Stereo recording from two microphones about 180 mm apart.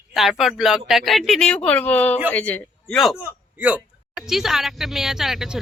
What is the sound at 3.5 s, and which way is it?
A woman's voice, 10° right (ahead or behind).